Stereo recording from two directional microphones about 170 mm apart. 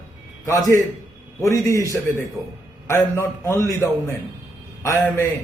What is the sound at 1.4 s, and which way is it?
Speech, 20° left (ahead or behind).